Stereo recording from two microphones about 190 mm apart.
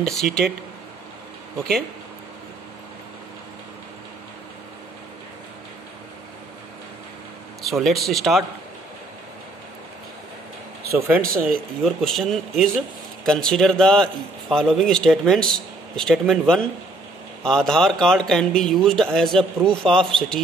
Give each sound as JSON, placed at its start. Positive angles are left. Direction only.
{"t": 0.0, "sound": "speech", "side_deg": 0}
{"t": 1.6, "sound": "speech", "side_deg": 0}
{"t": 7.6, "sound": "speech", "side_deg": 0}
{"t": 11.1, "sound": "speech", "side_deg": -45}
{"t": 11.8, "sound": "speech", "side_deg": 0}